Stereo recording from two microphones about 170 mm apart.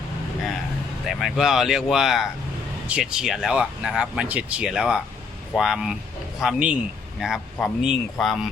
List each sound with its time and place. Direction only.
1.0 s speech: centre (ahead or behind)